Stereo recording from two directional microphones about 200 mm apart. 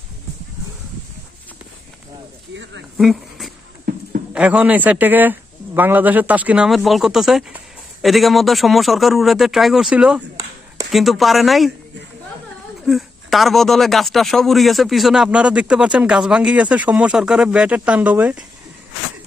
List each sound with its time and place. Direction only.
2.5 s speech: 65° right (ahead or behind)
3.0 s a man's voice: centre (ahead or behind)
12.8 s a man's voice: centre (ahead or behind)